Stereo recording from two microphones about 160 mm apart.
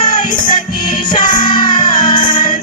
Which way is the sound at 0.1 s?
55° left (ahead or behind).